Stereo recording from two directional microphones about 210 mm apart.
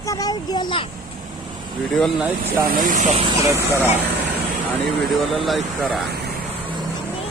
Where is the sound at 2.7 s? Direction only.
40° right (ahead or behind).